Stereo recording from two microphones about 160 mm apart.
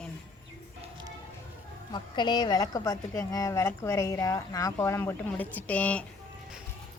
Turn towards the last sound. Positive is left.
turn(degrees=10)  # may be behind; listen again after turning